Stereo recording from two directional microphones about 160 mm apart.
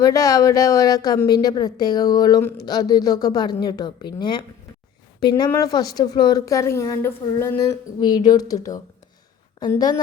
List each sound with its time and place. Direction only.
0.0 s a woman's voice: 20° left (ahead or behind)
5.5 s a woman's voice: 20° left (ahead or behind)
7.9 s a woman's voice: 25° left (ahead or behind)